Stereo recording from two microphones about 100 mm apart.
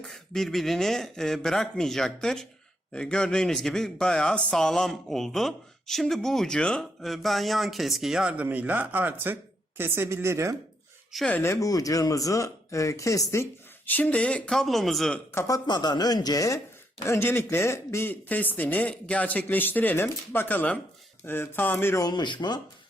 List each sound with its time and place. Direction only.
0.0 s speech: 5° left (ahead or behind); by 10.5 s 30° right (ahead or behind)
11.3 s speech: 25° left (ahead or behind)
13.9 s speech: 15° left (ahead or behind)
15.3 s speech: 30° left (ahead or behind)
17.0 s speech: 25° left (ahead or behind)
22.0 s speech: 50° left (ahead or behind)